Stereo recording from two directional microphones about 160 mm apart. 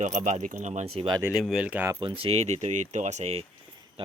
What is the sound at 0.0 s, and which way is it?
Speech, 50° right (ahead or behind).